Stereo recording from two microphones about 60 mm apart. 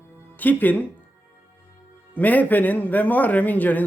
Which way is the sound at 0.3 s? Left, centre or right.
Left.